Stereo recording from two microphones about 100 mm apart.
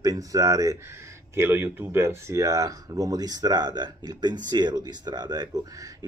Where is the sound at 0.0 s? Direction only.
35° right (ahead or behind).